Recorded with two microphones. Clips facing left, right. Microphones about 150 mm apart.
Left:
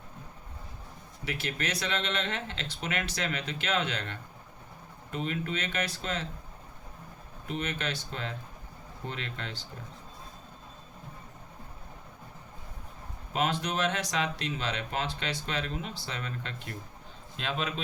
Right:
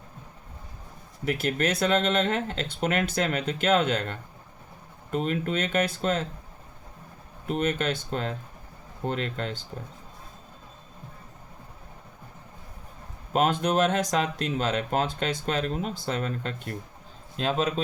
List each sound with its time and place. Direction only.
1.2 s speech: 45° right (ahead or behind)
7.4 s speech: 45° right (ahead or behind)
13.3 s speech: 45° right (ahead or behind)